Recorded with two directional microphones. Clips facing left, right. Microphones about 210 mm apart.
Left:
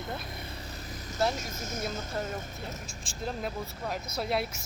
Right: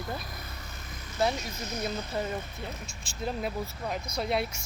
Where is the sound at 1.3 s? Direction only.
45° left (ahead or behind).